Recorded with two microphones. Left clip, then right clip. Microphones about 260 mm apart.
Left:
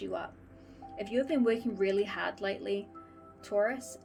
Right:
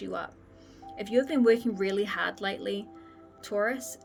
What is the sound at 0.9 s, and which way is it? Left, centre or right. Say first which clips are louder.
A woman's voice: right 4 dB; right.